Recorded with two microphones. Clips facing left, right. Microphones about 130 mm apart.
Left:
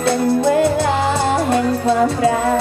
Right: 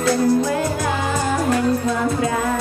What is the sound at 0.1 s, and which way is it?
Music, 25° left (ahead or behind).